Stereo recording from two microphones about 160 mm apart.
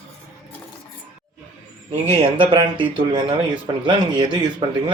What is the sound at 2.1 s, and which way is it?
Speech, 30° right (ahead or behind).